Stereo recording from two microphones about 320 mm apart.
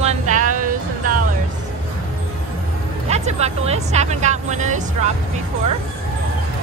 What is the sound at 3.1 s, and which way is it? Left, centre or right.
Speech, centre.